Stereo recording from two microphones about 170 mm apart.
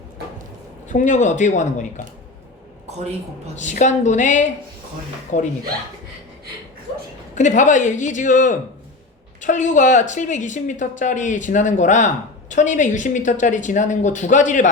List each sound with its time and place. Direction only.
0.9 s speech: 45° left (ahead or behind)
3.5 s speech: 45° left (ahead or behind)
7.3 s speech: 45° left (ahead or behind)